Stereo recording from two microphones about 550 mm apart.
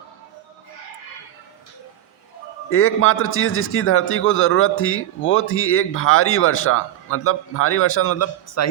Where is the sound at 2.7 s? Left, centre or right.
Left.